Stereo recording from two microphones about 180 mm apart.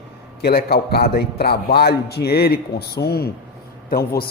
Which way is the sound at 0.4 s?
60° left (ahead or behind).